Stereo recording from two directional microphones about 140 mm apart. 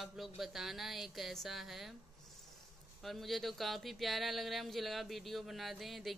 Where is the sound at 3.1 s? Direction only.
Centre (ahead or behind).